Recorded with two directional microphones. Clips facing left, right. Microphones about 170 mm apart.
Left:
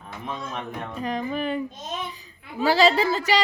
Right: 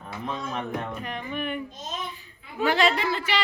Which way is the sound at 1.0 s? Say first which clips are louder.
Left 5 dB; 35° left (ahead or behind).